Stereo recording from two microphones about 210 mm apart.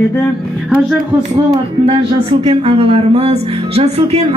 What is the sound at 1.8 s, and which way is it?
Speech, 30° right (ahead or behind).